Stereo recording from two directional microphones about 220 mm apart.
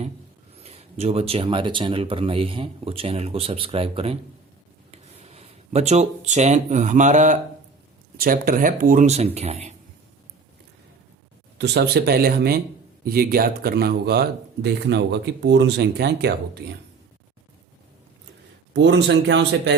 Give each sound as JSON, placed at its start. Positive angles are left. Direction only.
{"t": 0.6, "sound": "speech", "side_deg": -30}
{"t": 11.5, "sound": "speech", "side_deg": -50}
{"t": 18.7, "sound": "speech", "side_deg": -55}